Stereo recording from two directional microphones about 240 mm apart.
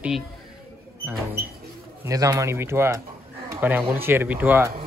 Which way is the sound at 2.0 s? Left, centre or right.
Centre.